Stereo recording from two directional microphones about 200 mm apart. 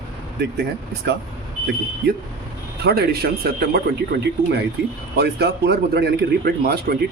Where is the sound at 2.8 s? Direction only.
50° right (ahead or behind).